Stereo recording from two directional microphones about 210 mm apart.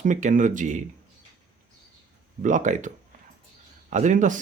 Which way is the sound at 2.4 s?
35° right (ahead or behind).